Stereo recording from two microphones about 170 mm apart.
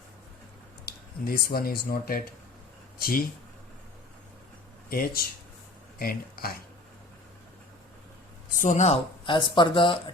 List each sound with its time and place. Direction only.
0.9 s speech: 60° left (ahead or behind)
4.9 s speech: 60° left (ahead or behind)
8.5 s speech: 45° left (ahead or behind)
9.2 s speech: 30° left (ahead or behind)